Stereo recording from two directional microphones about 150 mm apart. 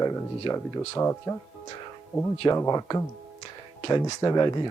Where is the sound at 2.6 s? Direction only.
20° left (ahead or behind).